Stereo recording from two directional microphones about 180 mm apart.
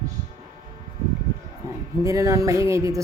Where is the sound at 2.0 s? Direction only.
15° right (ahead or behind).